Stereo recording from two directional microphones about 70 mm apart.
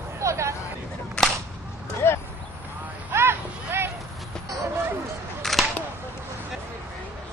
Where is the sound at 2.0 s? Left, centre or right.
Left.